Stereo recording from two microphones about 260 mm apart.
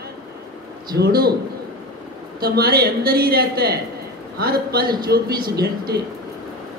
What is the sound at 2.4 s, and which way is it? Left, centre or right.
A man's voice, right.